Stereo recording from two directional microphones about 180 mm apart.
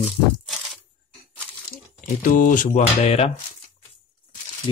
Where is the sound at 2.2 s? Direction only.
50° left (ahead or behind).